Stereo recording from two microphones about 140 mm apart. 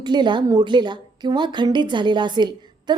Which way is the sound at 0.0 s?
30° right (ahead or behind).